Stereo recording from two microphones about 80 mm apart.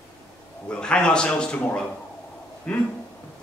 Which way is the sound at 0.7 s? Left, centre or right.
Centre.